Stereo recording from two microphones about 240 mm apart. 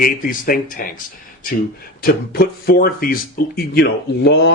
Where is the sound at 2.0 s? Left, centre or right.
Left.